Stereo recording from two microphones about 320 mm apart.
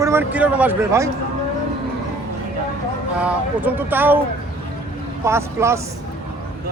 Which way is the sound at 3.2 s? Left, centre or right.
Centre.